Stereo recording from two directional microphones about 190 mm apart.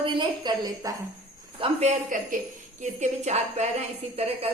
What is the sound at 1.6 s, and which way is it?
Speech, 40° right (ahead or behind).